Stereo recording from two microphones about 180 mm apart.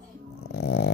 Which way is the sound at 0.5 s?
70° left (ahead or behind).